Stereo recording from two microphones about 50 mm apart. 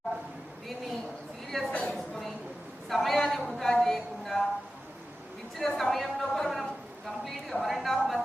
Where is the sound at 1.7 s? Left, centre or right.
Left.